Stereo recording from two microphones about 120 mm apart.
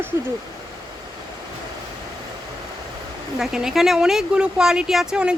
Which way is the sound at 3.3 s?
5° right (ahead or behind).